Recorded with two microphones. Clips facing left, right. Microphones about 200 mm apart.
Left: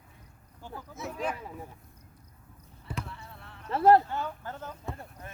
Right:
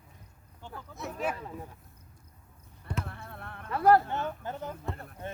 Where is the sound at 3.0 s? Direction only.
55° right (ahead or behind).